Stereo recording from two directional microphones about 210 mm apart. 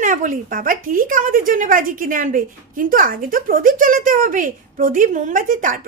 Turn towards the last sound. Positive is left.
turn(degrees=-40)  # may be behind; listen again after turning